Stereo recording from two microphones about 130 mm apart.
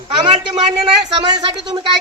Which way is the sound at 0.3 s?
60° right (ahead or behind).